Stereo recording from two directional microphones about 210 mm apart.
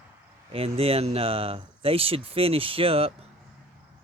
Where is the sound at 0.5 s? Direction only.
25° right (ahead or behind).